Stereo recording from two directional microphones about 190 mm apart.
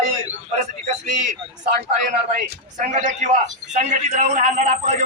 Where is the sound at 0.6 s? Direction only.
35° right (ahead or behind).